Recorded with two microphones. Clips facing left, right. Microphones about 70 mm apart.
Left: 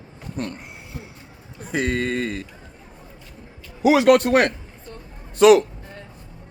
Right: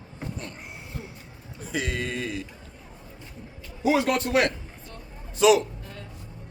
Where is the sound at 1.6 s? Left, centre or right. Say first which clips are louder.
Left 6 dB; left.